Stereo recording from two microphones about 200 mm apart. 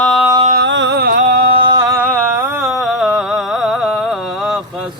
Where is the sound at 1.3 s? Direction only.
25° right (ahead or behind).